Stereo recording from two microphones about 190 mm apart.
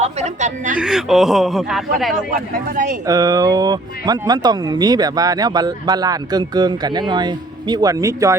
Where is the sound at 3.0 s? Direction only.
20° right (ahead or behind).